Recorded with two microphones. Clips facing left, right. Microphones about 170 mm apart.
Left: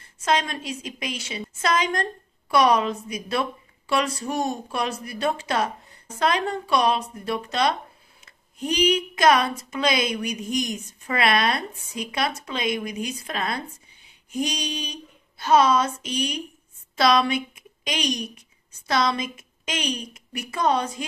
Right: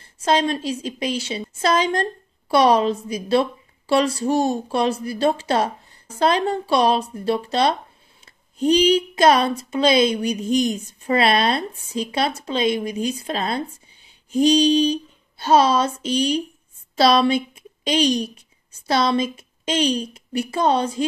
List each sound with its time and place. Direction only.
0.0 s a woman's voice: 30° right (ahead or behind)